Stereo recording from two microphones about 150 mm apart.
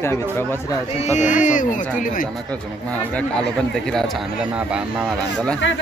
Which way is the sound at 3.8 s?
5° left (ahead or behind).